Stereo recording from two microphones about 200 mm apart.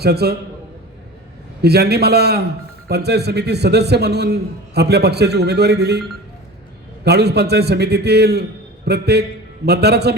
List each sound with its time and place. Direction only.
0.0 s a man's voice: 50° right (ahead or behind)
1.6 s a man's voice: 55° right (ahead or behind)